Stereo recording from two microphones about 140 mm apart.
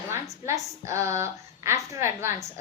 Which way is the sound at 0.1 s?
20° right (ahead or behind).